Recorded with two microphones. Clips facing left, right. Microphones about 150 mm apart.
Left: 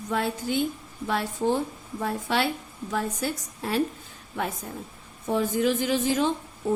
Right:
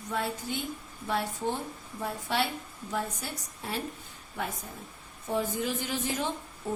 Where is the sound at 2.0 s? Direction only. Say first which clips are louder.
Left 4 dB; 90° left.